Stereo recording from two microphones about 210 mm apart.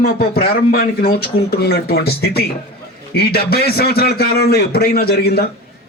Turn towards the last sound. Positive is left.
turn(degrees=50)  # may be behind; listen again after turning